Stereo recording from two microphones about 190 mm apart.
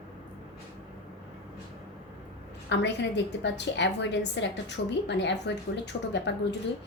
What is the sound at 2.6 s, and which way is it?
A woman's voice, 65° left (ahead or behind).